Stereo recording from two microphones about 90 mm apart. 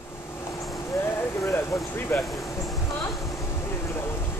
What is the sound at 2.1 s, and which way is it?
Speech, 25° left (ahead or behind).